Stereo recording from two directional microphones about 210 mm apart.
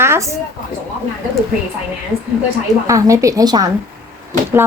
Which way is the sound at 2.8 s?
15° right (ahead or behind).